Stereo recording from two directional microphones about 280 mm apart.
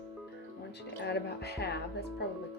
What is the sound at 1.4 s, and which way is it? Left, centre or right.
Speech, left.